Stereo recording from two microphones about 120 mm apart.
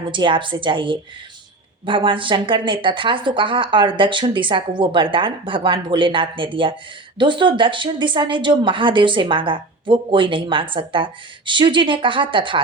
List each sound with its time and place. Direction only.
0.1 s speech: 45° right (ahead or behind)